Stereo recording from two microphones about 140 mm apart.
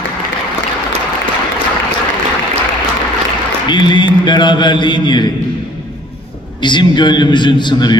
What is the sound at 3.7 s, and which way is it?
Mantra, 35° left (ahead or behind).